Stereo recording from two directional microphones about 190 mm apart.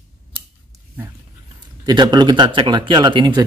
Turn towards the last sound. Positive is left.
turn(degrees=-25)  # may be behind; listen again after turning